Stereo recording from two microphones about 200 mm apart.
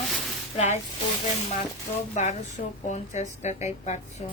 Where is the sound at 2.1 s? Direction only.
35° left (ahead or behind).